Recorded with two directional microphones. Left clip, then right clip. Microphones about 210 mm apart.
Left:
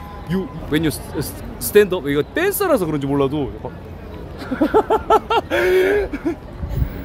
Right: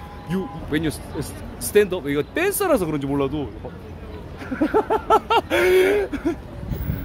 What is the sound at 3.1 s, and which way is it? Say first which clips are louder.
Speech: left 7 dB; 25° left (ahead or behind).